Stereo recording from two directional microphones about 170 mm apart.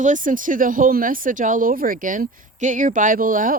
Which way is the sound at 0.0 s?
50° right (ahead or behind).